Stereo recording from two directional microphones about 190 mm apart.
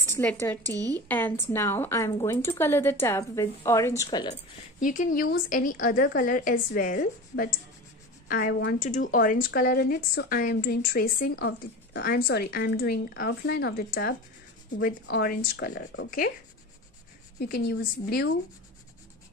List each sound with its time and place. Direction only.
0.1 s a woman's voice: 10° left (ahead or behind)
0.7 s speech: 20° right (ahead or behind)
1.0 s a woman's voice: 10° left (ahead or behind)
4.7 s a woman's voice: 45° left (ahead or behind); by 16.1 s 65° left (ahead or behind)
17.4 s speech: 55° left (ahead or behind)